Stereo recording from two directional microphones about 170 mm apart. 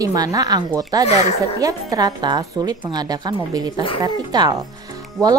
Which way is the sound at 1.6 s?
20° right (ahead or behind).